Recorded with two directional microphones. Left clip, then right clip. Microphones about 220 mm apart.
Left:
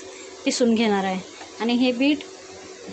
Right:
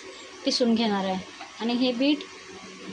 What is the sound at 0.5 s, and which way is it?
A woman's voice, 20° left (ahead or behind).